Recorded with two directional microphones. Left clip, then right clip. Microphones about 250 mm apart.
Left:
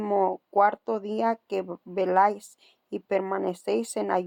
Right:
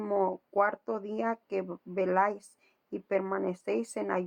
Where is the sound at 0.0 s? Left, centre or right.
Left.